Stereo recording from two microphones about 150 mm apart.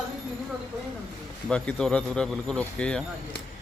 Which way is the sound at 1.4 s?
5° left (ahead or behind).